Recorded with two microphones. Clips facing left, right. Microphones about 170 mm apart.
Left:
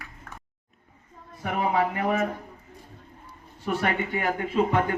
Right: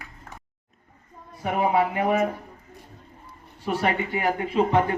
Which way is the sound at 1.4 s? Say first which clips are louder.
Right 3 dB; 25° right (ahead or behind).